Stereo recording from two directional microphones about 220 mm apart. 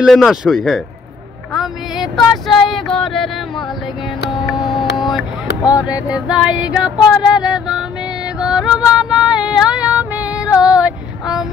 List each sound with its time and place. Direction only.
0.0 s female singing: centre (ahead or behind)
2.4 s female singing: centre (ahead or behind)
4.9 s vehicle: centre (ahead or behind)
5.6 s speech: 15° left (ahead or behind)
6.0 s female singing: 5° right (ahead or behind)